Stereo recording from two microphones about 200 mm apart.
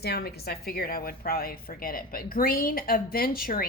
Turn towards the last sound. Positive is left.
turn(degrees=45)  # may be behind; listen again after turning